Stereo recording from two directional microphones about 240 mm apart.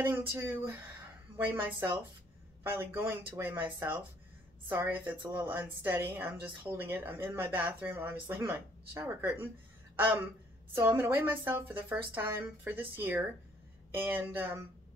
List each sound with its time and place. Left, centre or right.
0.0 s a woman's voice: centre